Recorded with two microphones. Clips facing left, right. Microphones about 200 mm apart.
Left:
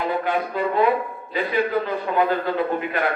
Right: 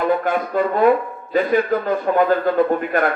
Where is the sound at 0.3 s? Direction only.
45° right (ahead or behind).